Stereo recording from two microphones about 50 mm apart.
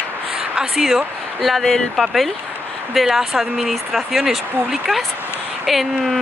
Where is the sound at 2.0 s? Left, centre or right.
Centre.